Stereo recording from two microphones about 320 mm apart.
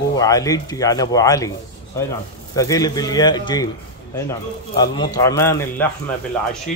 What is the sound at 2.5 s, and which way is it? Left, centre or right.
Speech, centre.